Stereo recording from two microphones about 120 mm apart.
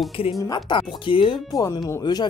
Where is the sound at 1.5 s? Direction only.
30° left (ahead or behind).